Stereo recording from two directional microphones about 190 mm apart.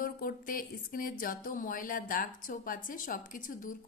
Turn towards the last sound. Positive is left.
turn(degrees=45)  # may be behind; listen again after turning